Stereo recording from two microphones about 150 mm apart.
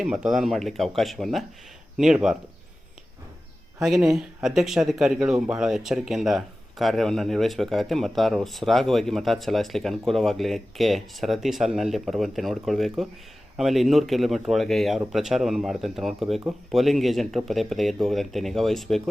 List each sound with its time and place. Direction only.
0.0 s speech: 5° right (ahead or behind)
3.8 s speech: centre (ahead or behind)